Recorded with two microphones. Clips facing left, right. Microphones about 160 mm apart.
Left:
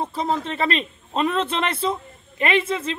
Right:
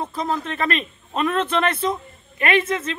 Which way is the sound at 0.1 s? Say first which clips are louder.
Left 1 dB; 30° left (ahead or behind).